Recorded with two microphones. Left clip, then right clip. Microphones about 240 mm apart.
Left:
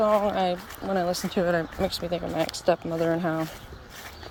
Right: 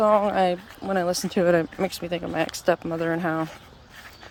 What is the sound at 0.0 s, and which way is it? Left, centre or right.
Speech, centre.